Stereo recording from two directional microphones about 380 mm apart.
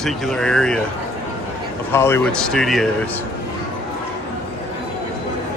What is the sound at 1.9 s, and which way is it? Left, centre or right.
Speech, centre.